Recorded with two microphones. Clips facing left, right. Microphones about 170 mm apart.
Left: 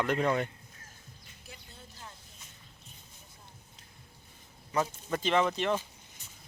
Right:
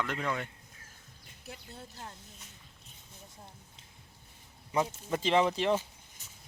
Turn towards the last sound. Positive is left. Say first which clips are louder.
# right 1 dB
turn(degrees=-30)  # may be behind; listen again after turning